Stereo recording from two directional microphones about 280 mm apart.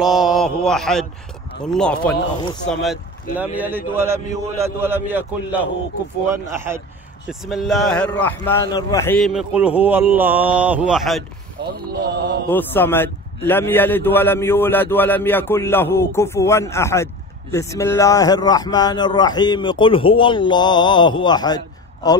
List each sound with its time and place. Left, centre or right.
0.0 s a man's voice: centre
11.9 s mantra: right
12.4 s a man's voice: centre